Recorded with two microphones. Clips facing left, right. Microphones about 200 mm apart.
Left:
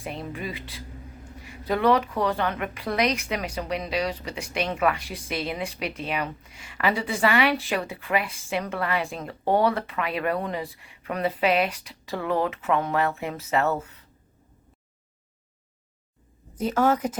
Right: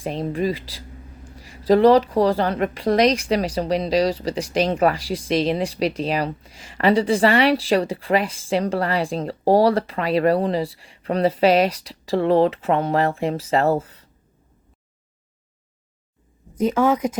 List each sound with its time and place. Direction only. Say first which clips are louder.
0.0 s a woman's voice: right 10 dB; 35° right (ahead or behind)
16.7 s speech: right 1 dB; 10° right (ahead or behind)